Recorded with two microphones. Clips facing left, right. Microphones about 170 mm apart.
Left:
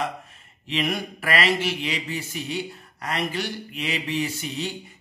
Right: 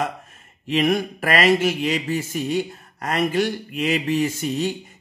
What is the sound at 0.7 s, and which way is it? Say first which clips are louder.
Speech: right 7 dB; 45° right (ahead or behind).